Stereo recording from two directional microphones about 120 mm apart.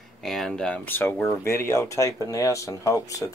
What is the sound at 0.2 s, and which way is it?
Speech, centre (ahead or behind).